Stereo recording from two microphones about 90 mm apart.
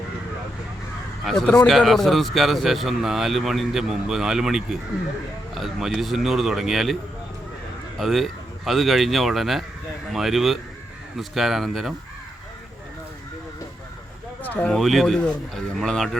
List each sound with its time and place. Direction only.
1.2 s speech: 5° left (ahead or behind)
7.9 s speech: centre (ahead or behind)
14.4 s a sound: 20° left (ahead or behind)
14.7 s speech: centre (ahead or behind)